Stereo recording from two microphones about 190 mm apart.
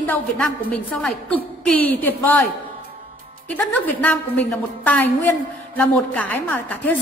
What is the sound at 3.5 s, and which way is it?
A woman's voice, 5° left (ahead or behind).